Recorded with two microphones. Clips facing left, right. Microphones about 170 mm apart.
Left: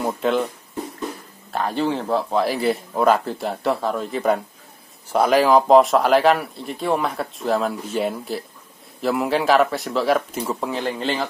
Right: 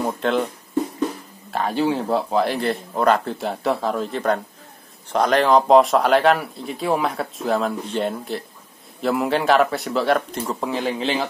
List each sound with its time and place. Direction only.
0.0 s speech: centre (ahead or behind)
1.5 s speech: centre (ahead or behind)